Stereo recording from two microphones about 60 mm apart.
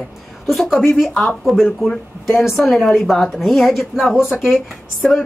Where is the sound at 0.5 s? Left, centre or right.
Centre.